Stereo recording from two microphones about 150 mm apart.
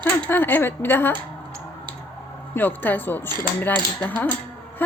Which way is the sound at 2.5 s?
15° left (ahead or behind).